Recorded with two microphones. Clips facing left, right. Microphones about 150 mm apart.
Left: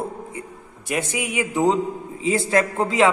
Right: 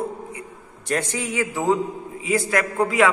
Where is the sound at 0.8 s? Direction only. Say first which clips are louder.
Even; 10° left (ahead or behind).